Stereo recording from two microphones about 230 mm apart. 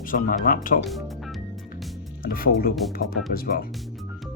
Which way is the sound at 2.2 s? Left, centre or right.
Left.